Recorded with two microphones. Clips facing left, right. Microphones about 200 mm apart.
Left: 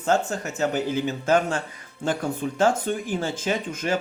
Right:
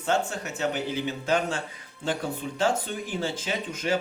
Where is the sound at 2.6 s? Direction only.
45° left (ahead or behind).